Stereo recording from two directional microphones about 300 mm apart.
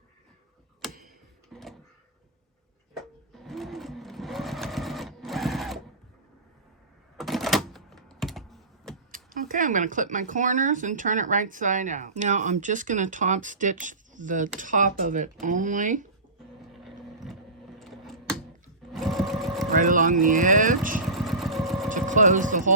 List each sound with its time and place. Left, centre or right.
1.5 s a sound: centre
2.9 s sewing machine: centre
7.2 s typing: centre
9.1 s speech: right
16.7 s a sound: centre
18.9 s sewing machine: centre
19.7 s speech: right
21.2 s vehicle: centre
21.8 s speech: right